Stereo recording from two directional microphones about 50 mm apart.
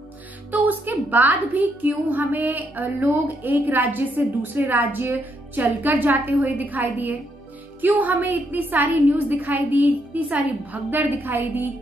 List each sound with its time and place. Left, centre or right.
0.5 s a woman's voice: right